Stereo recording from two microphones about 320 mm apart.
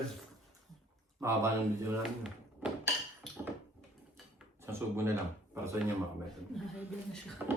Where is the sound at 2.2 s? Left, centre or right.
Centre.